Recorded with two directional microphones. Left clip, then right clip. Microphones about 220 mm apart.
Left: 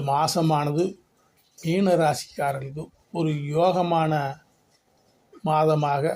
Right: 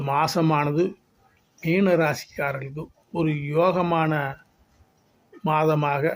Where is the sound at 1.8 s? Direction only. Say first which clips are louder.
Left 1 dB; 5° right (ahead or behind).